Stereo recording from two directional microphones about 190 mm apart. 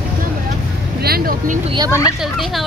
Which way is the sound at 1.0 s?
50° right (ahead or behind).